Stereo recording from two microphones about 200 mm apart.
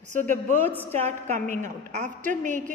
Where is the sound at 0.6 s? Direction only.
10° left (ahead or behind).